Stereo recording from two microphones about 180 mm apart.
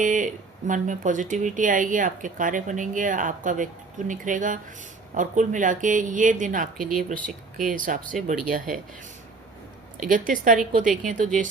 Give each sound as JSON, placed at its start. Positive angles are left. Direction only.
{"t": 0.0, "sound": "a sound", "side_deg": -45}
{"t": 0.7, "sound": "speech", "side_deg": -45}
{"t": 10.0, "sound": "speech", "side_deg": -50}